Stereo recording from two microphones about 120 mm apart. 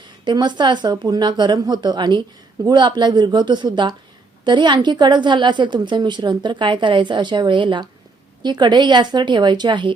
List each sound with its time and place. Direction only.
0.3 s a woman's voice: 40° right (ahead or behind)